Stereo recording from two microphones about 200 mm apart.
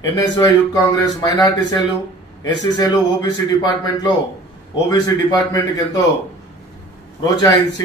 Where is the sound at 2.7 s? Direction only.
20° left (ahead or behind).